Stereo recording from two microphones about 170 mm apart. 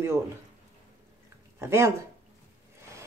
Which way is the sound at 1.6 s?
15° right (ahead or behind).